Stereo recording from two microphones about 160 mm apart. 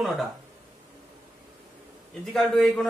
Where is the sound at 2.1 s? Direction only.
5° left (ahead or behind).